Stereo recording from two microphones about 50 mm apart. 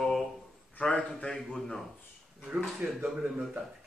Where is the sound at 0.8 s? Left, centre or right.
Left.